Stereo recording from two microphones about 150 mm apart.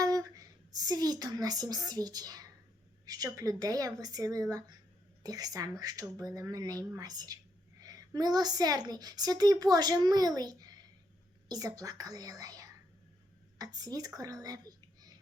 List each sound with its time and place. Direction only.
0.0 s a woman's voice: 25° right (ahead or behind)